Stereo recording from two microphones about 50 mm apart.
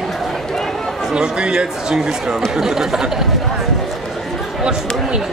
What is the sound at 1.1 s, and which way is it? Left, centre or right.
Speech, centre.